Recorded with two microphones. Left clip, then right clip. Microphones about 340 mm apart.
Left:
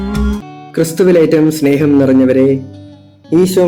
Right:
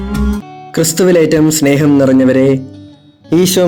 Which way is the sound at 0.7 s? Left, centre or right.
Right.